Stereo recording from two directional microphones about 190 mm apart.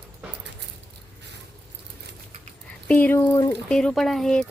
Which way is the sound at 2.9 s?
10° left (ahead or behind).